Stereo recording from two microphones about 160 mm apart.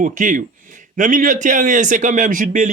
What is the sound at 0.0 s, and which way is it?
A man's voice, 55° right (ahead or behind).